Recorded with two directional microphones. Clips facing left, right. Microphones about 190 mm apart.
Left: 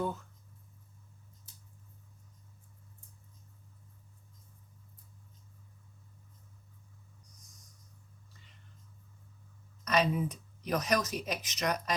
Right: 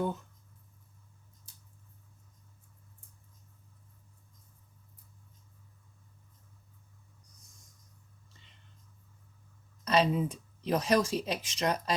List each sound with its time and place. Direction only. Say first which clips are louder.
9.8 s speech: right 2 dB; 30° right (ahead or behind)